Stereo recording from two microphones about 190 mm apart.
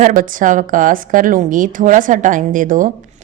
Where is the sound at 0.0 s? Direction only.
45° right (ahead or behind).